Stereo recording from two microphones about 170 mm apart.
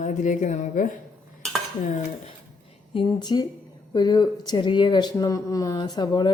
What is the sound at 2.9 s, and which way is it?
Speech, 30° left (ahead or behind).